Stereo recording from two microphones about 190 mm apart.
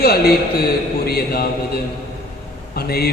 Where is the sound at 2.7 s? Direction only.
55° left (ahead or behind).